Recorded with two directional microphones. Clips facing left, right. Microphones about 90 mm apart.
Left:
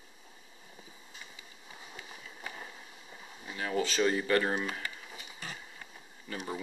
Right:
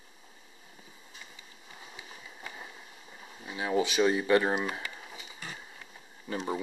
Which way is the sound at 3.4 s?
15° right (ahead or behind).